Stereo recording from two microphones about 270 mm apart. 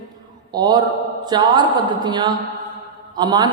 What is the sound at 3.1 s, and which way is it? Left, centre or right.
Speech, centre.